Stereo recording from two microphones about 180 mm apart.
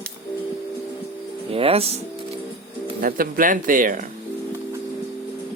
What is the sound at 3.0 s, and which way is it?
Speech, 50° right (ahead or behind).